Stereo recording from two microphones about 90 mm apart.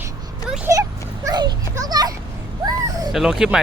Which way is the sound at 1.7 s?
40° right (ahead or behind).